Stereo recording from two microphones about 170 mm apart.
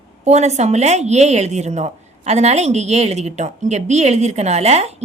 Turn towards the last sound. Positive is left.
turn(degrees=-40)  # may be behind; listen again after turning